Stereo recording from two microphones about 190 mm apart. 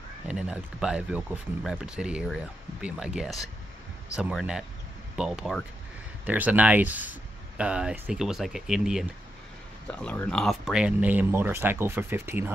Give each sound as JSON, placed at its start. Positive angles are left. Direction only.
{"t": 0.3, "sound": "speech", "side_deg": -5}